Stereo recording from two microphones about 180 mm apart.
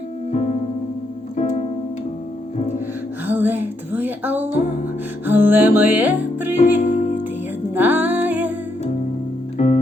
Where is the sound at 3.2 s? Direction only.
10° right (ahead or behind).